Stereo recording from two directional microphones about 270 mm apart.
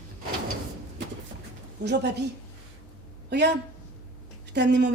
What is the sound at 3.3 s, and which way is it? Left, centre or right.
Speech, right.